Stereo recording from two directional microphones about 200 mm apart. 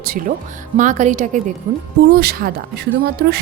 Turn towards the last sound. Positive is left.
turn(degrees=-55)  # may be behind; listen again after turning